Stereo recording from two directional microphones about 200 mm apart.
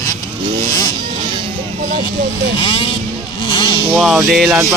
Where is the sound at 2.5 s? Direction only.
25° left (ahead or behind).